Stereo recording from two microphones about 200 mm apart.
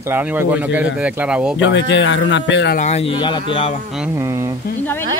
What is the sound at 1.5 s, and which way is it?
Speech, 65° left (ahead or behind).